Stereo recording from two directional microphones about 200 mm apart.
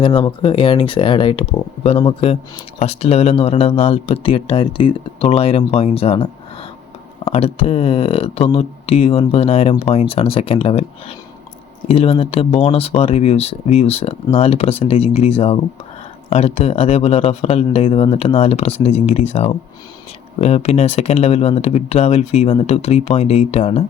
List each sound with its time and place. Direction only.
0.0 s speech: 25° left (ahead or behind)
11.9 s speech: 30° left (ahead or behind)